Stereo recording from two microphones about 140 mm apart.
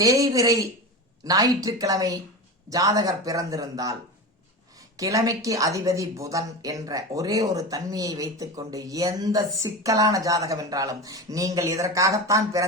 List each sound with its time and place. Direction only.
0.0 s a woman's voice: 25° right (ahead or behind)
4.9 s a woman's voice: 25° right (ahead or behind)